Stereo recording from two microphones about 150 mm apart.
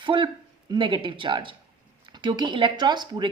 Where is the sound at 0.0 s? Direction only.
35° right (ahead or behind).